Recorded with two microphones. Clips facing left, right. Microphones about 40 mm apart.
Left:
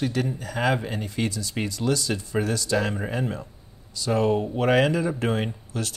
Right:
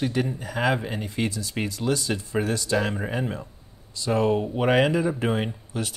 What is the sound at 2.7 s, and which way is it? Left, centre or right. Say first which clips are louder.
Speech: even; centre.